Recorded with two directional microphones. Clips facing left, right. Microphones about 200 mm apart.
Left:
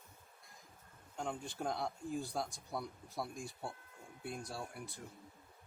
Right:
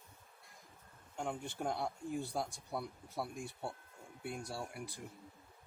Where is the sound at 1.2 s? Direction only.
5° right (ahead or behind).